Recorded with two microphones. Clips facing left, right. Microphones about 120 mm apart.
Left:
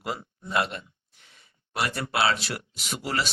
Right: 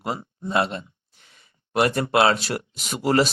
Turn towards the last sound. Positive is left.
turn(degrees=-45)  # may be behind; listen again after turning